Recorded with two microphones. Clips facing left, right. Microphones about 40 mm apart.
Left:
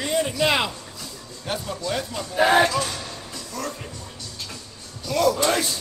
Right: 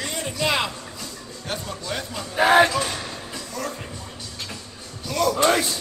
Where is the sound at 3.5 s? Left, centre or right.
Centre.